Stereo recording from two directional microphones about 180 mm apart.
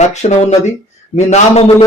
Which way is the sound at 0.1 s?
40° left (ahead or behind).